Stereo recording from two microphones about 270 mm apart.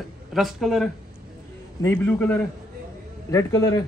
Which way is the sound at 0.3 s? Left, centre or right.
Centre.